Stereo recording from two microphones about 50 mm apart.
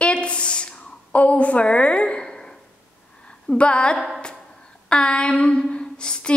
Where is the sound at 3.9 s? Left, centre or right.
Centre.